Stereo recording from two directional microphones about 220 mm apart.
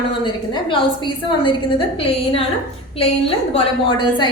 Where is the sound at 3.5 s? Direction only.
20° left (ahead or behind).